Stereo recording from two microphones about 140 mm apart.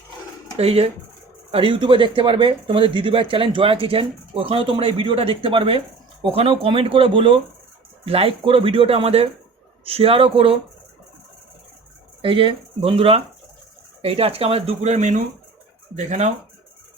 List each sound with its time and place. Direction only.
0.5 s speech: 45° right (ahead or behind)
12.2 s speech: 40° right (ahead or behind); by 16.3 s 60° right (ahead or behind)